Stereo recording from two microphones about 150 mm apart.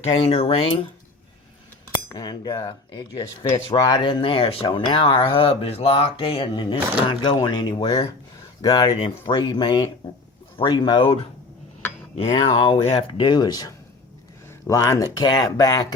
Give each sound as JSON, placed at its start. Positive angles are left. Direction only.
{"t": 0.3, "sound": "speech", "side_deg": 40}
{"t": 2.0, "sound": "speech", "side_deg": 25}